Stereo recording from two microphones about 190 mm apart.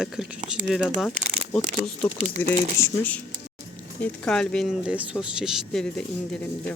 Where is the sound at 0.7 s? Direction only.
Centre (ahead or behind).